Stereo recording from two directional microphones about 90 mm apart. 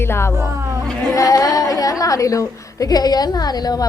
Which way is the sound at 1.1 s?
40° left (ahead or behind).